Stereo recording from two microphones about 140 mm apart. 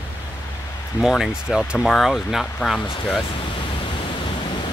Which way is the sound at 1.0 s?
Centre (ahead or behind).